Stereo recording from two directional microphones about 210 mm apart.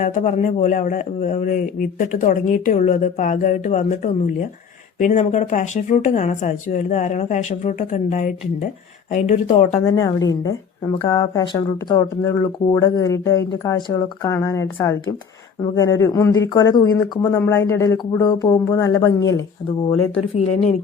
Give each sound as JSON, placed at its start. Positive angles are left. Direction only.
{"t": 0.0, "sound": "speech", "side_deg": 35}
{"t": 9.8, "sound": "a woman's voice", "side_deg": 15}
{"t": 20.1, "sound": "speech", "side_deg": 25}